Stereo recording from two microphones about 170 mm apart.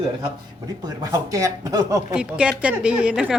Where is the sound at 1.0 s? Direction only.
20° right (ahead or behind).